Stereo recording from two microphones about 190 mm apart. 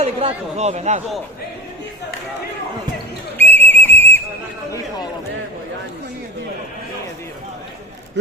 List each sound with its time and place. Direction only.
0.0 s speech: 35° right (ahead or behind)
3.3 s whistle: 10° left (ahead or behind)